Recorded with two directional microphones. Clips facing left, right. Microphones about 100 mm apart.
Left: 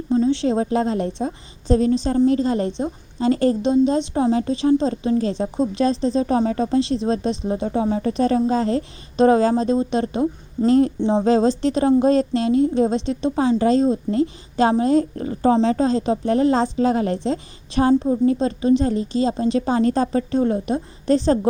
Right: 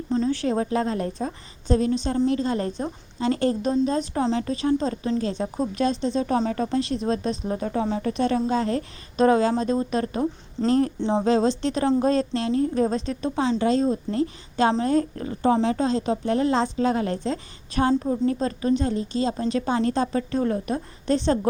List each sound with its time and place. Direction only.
0.1 s a sound: 15° left (ahead or behind)
0.3 s a woman's voice: 25° left (ahead or behind)
4.4 s a woman's voice: 30° left (ahead or behind)
11.3 s a woman's voice: 35° left (ahead or behind)